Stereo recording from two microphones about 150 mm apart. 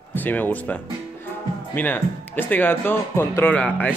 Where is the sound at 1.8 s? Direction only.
15° left (ahead or behind).